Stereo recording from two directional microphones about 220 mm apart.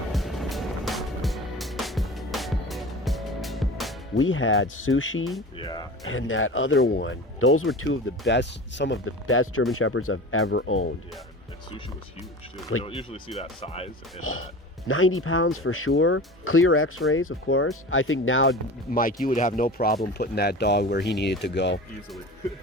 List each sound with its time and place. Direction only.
0.1 s music: centre (ahead or behind)
4.2 s speech: 65° left (ahead or behind)
5.5 s speech: 20° left (ahead or behind)
6.1 s speech: 65° left (ahead or behind)
8.3 s speech: 55° left (ahead or behind)
12.8 s speech: 25° left (ahead or behind)
14.2 s speech: 70° left (ahead or behind)
18.9 s speech: 40° left (ahead or behind)